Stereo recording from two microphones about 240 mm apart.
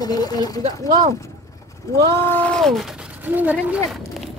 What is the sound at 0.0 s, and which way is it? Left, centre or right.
Speech, centre.